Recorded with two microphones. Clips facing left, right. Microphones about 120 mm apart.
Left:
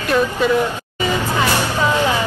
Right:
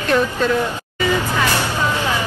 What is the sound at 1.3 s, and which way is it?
Vehicle, 15° left (ahead or behind).